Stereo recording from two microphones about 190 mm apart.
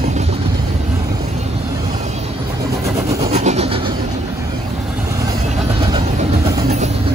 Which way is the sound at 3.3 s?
35° right (ahead or behind).